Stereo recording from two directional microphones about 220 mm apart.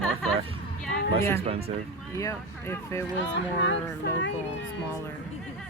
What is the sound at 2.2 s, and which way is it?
Speech, 10° left (ahead or behind).